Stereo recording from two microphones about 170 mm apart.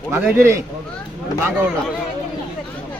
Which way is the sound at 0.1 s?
15° right (ahead or behind).